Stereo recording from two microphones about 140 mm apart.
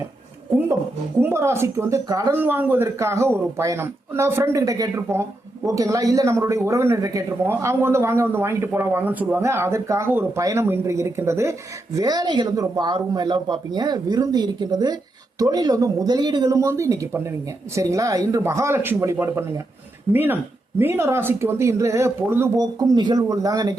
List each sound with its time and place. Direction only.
1.2 s speech: 20° right (ahead or behind)
22.6 s speech: 30° right (ahead or behind)